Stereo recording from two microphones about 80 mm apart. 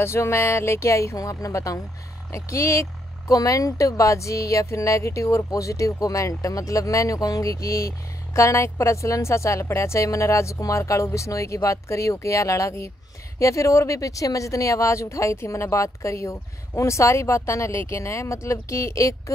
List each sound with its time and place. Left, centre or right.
0.0 s speech: left